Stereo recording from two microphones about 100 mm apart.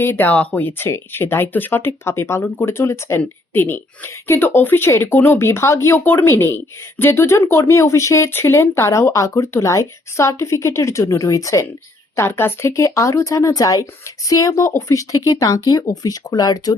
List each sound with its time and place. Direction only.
0.0 s speech: 20° left (ahead or behind); by 16.7 s 40° left (ahead or behind)